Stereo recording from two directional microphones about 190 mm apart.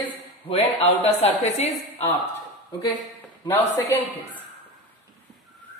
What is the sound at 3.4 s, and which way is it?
Speech, 10° left (ahead or behind).